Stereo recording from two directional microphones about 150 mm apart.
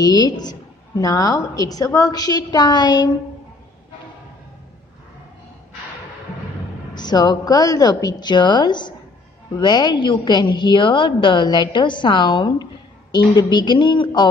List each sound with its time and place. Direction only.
0.0 s a woman's voice: 25° left (ahead or behind)
7.0 s a woman's voice: 25° left (ahead or behind)